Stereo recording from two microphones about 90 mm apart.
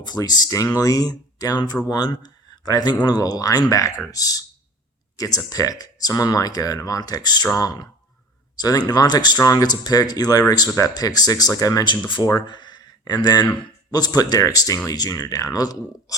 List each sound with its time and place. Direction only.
0.0 s speech: 50° left (ahead or behind)